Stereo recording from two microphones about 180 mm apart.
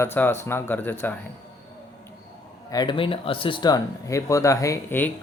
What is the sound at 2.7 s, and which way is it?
Speech, 25° left (ahead or behind).